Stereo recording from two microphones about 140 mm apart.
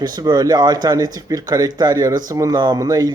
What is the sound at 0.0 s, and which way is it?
Speech, 30° right (ahead or behind).